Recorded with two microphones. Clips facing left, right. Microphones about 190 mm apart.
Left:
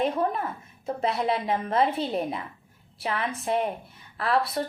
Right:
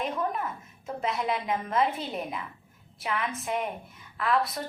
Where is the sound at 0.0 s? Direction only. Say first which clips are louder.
Left 5 dB; 35° left (ahead or behind).